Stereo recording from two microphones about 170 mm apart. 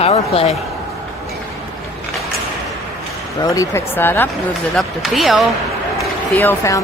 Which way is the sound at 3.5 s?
20° left (ahead or behind).